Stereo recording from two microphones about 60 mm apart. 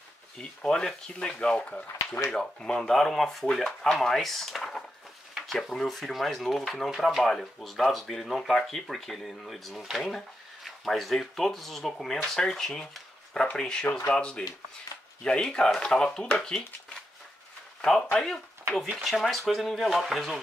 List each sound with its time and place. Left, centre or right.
0.4 s speech: centre
19.0 s speech: centre